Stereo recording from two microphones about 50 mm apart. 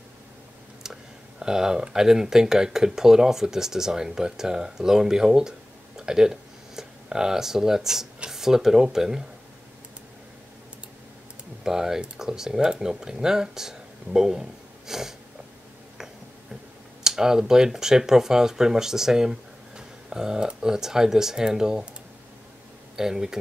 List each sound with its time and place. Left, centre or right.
0.8 s a sound: centre
1.4 s speech: centre
11.6 s speech: centre
17.0 s speech: centre
22.9 s speech: centre